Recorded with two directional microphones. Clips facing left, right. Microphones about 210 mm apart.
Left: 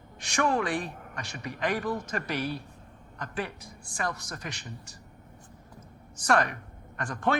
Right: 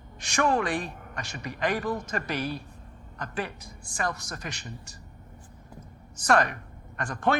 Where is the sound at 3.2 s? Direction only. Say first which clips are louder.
Right 1 dB; 45° right (ahead or behind).